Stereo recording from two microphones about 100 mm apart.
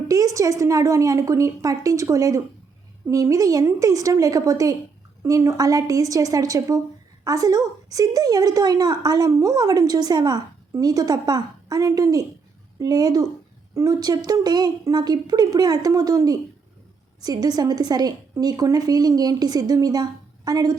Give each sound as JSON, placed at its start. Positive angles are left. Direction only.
{"t": 0.1, "sound": "a woman's voice", "side_deg": -35}